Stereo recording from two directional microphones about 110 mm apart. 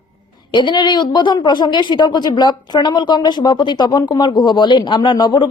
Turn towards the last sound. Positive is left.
turn(degrees=45)  # may be behind; listen again after turning